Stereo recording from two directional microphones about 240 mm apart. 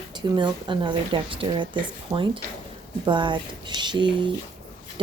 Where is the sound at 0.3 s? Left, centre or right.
Centre.